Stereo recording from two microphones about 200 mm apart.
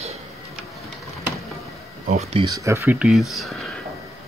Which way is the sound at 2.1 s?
30° right (ahead or behind).